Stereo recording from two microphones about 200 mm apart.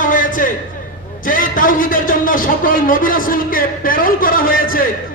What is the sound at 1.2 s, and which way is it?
A man's voice, 45° left (ahead or behind).